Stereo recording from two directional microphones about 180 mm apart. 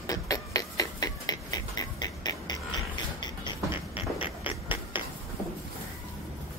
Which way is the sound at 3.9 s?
30° left (ahead or behind).